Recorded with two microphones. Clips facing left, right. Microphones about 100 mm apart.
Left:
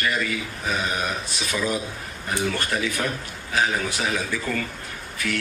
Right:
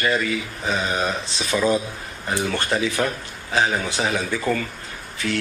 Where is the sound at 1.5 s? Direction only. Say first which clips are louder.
Right 6 dB; 35° right (ahead or behind).